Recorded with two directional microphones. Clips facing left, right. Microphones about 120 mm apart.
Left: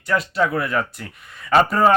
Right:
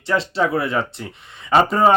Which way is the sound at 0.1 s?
30° right (ahead or behind).